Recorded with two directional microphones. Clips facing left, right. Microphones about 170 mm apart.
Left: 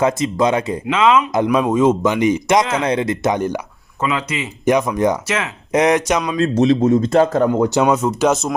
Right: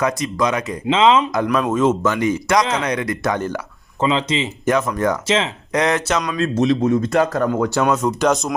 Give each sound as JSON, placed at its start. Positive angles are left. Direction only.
{"t": 0.0, "sound": "speech", "side_deg": 25}
{"t": 0.9, "sound": "speech", "side_deg": -25}
{"t": 1.5, "sound": "speech", "side_deg": 10}
{"t": 4.0, "sound": "speech", "side_deg": -25}
{"t": 4.6, "sound": "speech", "side_deg": 15}
{"t": 6.6, "sound": "speech", "side_deg": 30}